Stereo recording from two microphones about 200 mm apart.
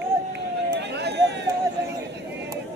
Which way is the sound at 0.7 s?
55° right (ahead or behind).